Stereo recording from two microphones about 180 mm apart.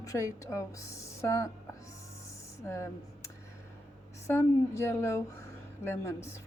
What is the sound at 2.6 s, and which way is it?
A woman's voice, 15° left (ahead or behind).